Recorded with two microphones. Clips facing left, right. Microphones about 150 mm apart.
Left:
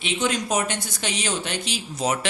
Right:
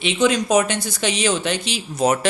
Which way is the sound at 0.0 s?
90° right.